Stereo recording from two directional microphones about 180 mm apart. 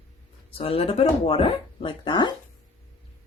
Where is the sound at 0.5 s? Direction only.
30° left (ahead or behind).